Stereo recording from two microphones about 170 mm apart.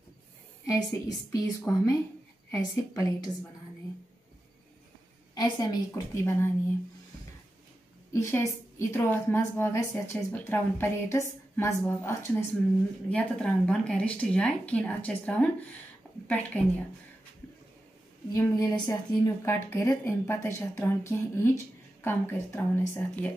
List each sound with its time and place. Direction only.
0.7 s a woman's voice: 20° left (ahead or behind)
5.3 s a woman's voice: 25° left (ahead or behind)
8.1 s a woman's voice: 15° left (ahead or behind)
13.1 s a woman's voice: 5° left (ahead or behind)
18.3 s a woman's voice: 20° left (ahead or behind)